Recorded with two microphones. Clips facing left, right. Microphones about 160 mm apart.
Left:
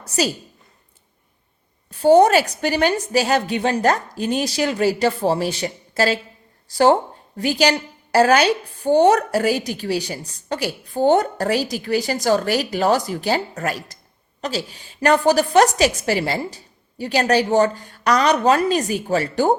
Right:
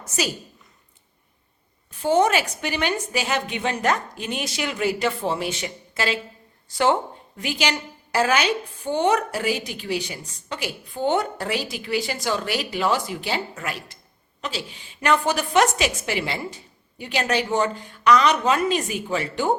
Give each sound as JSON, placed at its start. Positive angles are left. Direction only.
{"t": 1.9, "sound": "a woman's voice", "side_deg": 35}